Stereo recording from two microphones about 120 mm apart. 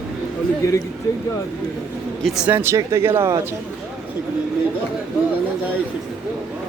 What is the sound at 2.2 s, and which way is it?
Speech, 5° right (ahead or behind).